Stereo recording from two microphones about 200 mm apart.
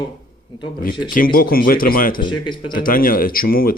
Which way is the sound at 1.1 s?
45° left (ahead or behind).